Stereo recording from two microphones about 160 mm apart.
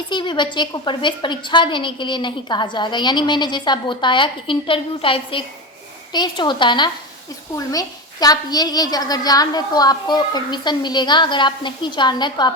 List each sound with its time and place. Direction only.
0.1 s a woman's voice: 30° left (ahead or behind)